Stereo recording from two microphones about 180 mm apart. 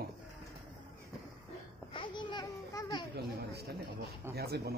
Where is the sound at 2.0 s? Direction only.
25° left (ahead or behind).